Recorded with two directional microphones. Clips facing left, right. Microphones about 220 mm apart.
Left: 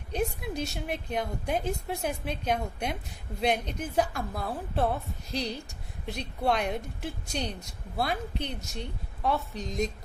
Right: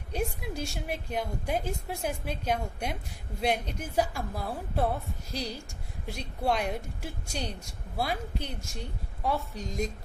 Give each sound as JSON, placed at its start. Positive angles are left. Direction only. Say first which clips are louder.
{"t": 0.1, "sound": "a woman's voice", "louder": "left 2 dB", "side_deg": -10}